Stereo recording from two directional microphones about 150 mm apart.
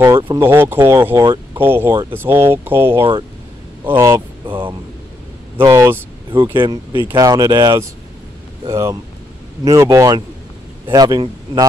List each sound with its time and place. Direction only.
0.4 s speech: 15° right (ahead or behind)
4.5 s a sound: 35° right (ahead or behind)
5.6 s speech: 20° right (ahead or behind)
6.3 s speech: 30° right (ahead or behind)
7.0 s speech: 20° right (ahead or behind)